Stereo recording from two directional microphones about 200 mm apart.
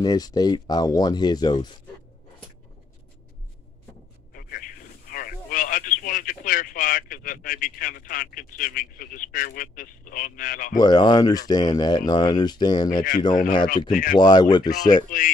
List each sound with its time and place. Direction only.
0.0 s speech: 20° left (ahead or behind)
4.3 s radio: 45° left (ahead or behind)
10.8 s speech: 20° left (ahead or behind)
13.3 s speech: 40° left (ahead or behind)
14.1 s speech: 20° left (ahead or behind)
15.0 s speech: 40° left (ahead or behind)